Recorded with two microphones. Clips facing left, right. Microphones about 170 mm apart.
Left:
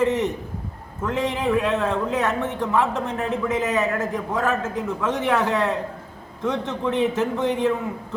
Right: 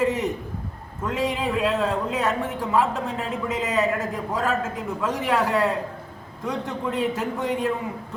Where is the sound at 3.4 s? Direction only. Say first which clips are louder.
Even; centre (ahead or behind).